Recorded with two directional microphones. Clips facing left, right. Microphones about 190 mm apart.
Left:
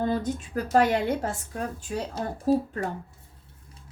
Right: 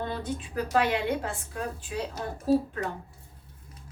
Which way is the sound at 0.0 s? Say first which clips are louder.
Left 6 dB; 45° left (ahead or behind).